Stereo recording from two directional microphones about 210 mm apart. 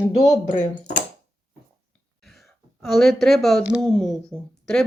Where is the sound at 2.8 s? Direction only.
Centre (ahead or behind).